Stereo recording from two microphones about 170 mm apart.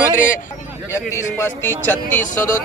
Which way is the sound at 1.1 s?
15° left (ahead or behind).